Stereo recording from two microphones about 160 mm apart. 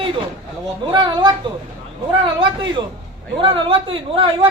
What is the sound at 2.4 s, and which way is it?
A man's voice, 30° right (ahead or behind).